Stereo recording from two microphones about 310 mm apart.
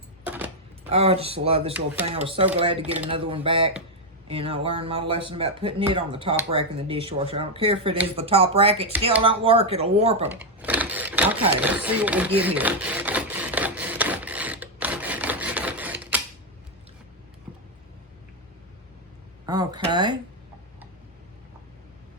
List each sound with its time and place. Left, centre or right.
0.3 s a sound: centre
0.9 s speech: centre
10.6 s sewing machine: centre
19.5 s speech: centre